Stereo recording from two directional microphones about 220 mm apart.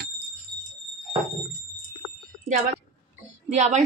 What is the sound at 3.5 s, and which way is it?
Speech, 30° right (ahead or behind).